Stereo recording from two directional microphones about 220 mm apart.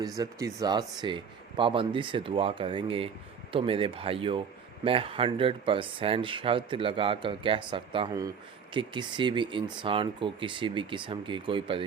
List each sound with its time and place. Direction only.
0.2 s a man's voice: 15° right (ahead or behind)